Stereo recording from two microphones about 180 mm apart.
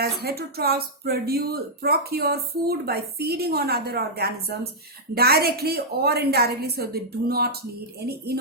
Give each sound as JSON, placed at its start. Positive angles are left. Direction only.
{"t": 0.0, "sound": "speech", "side_deg": -60}